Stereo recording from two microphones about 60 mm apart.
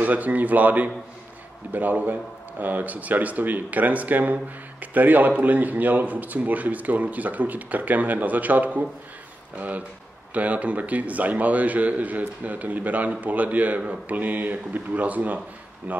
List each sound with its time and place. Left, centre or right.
0.0 s a man's voice: right